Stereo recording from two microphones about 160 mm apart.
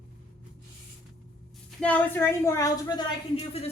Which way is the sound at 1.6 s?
10° left (ahead or behind).